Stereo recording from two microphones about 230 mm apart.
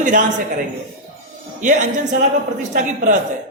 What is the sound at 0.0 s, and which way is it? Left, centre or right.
Speech, right.